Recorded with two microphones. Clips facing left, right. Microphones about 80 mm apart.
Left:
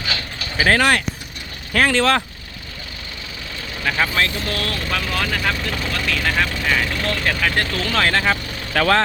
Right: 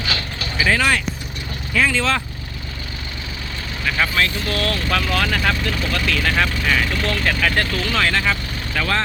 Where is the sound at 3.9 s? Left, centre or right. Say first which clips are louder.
Right 1 dB; left.